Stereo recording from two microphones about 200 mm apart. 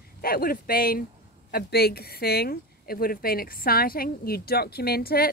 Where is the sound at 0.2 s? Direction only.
50° left (ahead or behind).